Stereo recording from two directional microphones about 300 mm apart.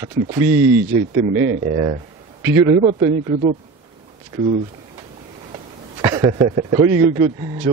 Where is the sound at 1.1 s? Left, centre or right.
Right.